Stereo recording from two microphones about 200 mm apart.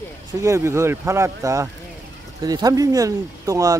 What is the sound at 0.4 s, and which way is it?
Speech, 15° right (ahead or behind).